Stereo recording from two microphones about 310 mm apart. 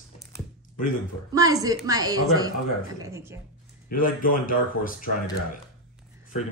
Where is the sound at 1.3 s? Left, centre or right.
Centre.